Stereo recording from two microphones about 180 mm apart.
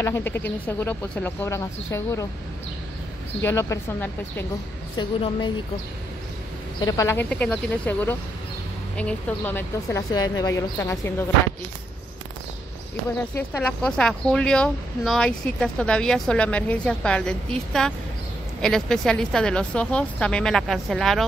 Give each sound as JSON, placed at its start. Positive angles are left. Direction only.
{"t": 0.0, "sound": "speech", "side_deg": 15}
{"t": 3.4, "sound": "speech", "side_deg": 15}
{"t": 4.9, "sound": "a woman's voice", "side_deg": 25}
{"t": 6.8, "sound": "speech", "side_deg": 20}
{"t": 13.4, "sound": "speech", "side_deg": 10}